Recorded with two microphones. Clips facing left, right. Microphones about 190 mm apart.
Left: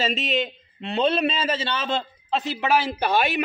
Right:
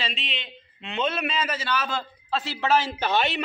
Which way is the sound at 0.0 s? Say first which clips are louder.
Left 10 dB; 45° left (ahead or behind).